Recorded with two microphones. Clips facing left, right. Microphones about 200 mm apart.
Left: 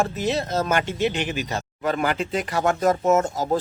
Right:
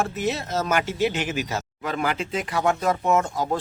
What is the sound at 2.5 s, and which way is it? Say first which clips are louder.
Speech: left 2 dB; 45° left (ahead or behind).